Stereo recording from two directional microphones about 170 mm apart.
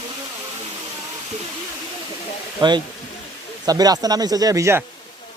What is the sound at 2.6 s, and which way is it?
Speech, 25° right (ahead or behind).